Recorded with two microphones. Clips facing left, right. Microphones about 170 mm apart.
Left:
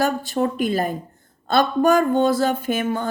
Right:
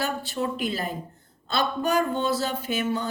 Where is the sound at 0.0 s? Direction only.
45° left (ahead or behind).